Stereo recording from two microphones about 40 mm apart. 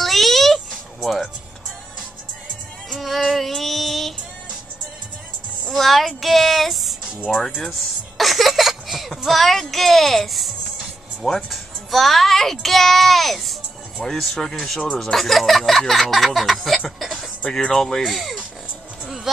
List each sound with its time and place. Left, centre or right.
0.0 s music: centre
3.0 s music: centre
5.7 s speech: centre
8.2 s a sound: centre
9.2 s speech: centre
11.5 s a child's voice: centre
17.0 s a sound: centre
17.5 s speech: centre
18.0 s speech: centre